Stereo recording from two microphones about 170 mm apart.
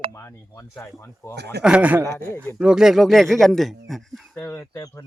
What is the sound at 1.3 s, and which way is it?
Speech, 80° right.